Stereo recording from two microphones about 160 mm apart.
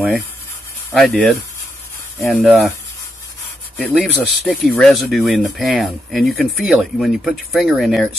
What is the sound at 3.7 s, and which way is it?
Speech, centre (ahead or behind).